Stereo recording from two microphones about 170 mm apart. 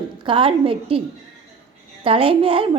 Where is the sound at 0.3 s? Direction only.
30° right (ahead or behind).